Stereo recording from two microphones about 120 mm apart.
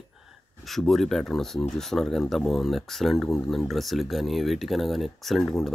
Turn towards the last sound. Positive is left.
turn(degrees=0)  # may be behind; listen again after turning